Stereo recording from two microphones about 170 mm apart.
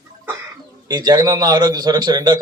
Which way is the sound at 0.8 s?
25° right (ahead or behind).